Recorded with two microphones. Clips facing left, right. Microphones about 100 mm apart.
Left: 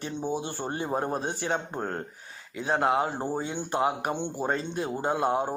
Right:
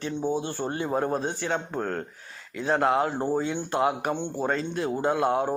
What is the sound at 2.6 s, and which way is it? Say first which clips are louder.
Speech: right 2 dB; 15° left (ahead or behind).